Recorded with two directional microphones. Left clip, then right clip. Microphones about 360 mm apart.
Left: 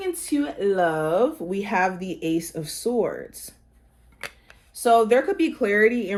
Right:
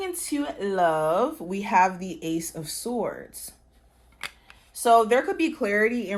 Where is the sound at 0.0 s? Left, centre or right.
Right.